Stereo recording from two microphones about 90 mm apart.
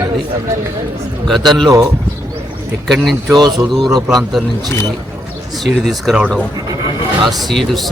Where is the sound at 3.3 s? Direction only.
50° right (ahead or behind).